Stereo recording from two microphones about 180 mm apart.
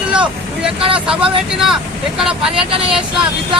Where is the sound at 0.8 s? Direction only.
30° right (ahead or behind).